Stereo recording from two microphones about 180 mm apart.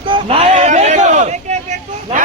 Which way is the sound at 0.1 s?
30° right (ahead or behind).